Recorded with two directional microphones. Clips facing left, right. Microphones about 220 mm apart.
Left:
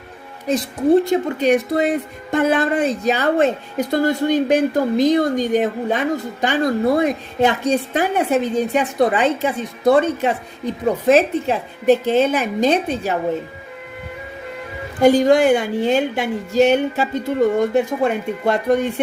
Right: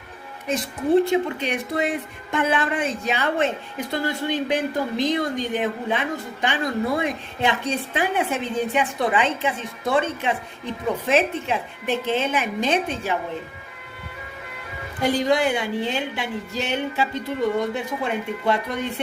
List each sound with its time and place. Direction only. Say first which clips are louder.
0.5 s a woman's voice: left 5 dB; 40° left (ahead or behind)
15.0 s a woman's voice: left 8 dB; 45° left (ahead or behind)